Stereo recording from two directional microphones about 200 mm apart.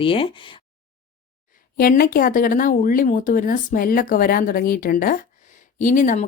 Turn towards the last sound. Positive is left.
turn(degrees=40)  # may be behind; listen again after turning